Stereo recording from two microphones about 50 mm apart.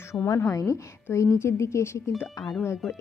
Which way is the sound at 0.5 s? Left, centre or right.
Left.